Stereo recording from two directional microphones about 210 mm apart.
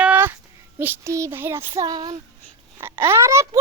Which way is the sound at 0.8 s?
10° right (ahead or behind).